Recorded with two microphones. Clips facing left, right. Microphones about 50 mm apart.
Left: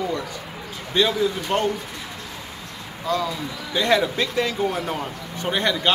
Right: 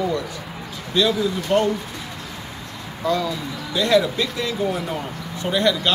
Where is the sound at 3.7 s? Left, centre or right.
Left.